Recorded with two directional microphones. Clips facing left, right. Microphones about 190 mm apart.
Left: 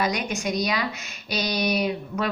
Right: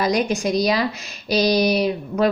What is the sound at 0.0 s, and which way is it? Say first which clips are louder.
A woman's voice: right 6 dB; 35° right (ahead or behind).